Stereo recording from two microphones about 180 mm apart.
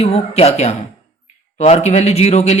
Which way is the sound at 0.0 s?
35° left (ahead or behind).